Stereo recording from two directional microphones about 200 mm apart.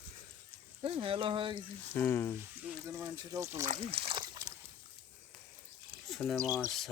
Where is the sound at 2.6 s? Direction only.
10° right (ahead or behind).